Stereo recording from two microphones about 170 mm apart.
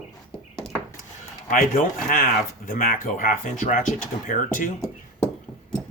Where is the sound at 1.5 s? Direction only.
55° left (ahead or behind).